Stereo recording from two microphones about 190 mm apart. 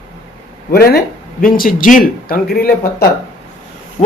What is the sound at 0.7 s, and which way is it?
Speech, 55° left (ahead or behind).